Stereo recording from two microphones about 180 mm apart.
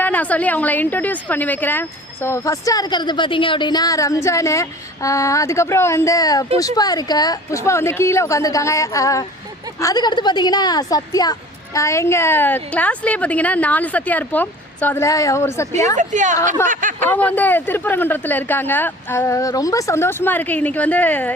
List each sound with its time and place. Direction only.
0.0 s a woman's voice: 10° left (ahead or behind)
16.0 s a woman's voice: 45° right (ahead or behind)
17.1 s a woman's voice: 10° left (ahead or behind)